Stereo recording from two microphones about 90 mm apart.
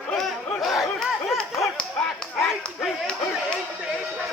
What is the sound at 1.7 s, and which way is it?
Speech, 10° left (ahead or behind).